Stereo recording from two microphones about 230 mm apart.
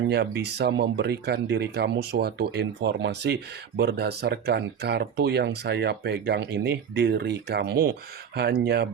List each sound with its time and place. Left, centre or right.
0.1 s speech: right